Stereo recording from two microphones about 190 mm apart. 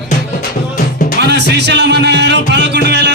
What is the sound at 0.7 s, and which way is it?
Music, 45° left (ahead or behind).